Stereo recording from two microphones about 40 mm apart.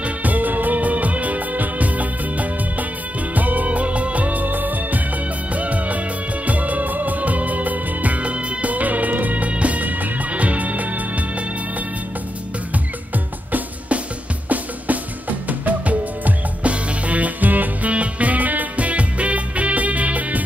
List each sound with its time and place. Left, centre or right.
0.0 s music: right
12.7 s music: right
17.9 s music: right